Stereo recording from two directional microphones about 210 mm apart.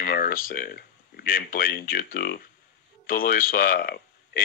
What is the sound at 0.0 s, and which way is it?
Speech, 45° left (ahead or behind).